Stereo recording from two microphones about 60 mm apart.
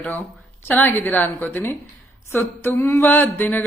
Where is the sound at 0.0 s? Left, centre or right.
Left.